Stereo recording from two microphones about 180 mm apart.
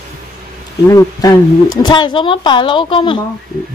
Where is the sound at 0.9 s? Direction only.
20° left (ahead or behind).